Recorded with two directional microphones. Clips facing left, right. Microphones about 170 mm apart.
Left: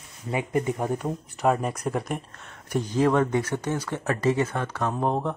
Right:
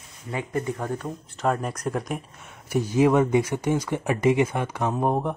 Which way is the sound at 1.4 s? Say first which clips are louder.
Left 1 dB; 5° left (ahead or behind).